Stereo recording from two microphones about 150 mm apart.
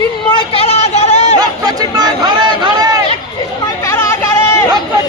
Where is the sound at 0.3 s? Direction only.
35° left (ahead or behind).